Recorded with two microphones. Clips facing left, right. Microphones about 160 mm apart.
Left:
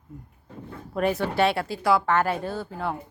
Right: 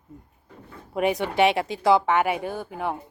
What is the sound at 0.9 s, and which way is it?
Speech, 15° right (ahead or behind).